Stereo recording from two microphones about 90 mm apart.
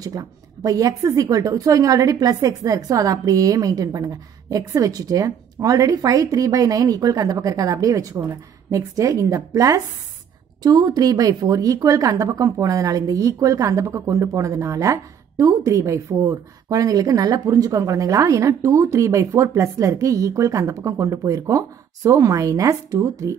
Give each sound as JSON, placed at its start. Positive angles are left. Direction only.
{"t": 0.0, "sound": "a woman's voice", "side_deg": -40}